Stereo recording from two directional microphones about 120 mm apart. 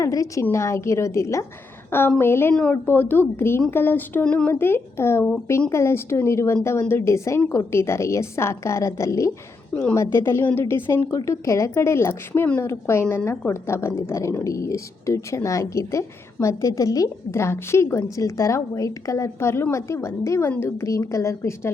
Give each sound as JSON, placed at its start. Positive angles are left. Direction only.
{"t": 0.0, "sound": "a woman's voice", "side_deg": 25}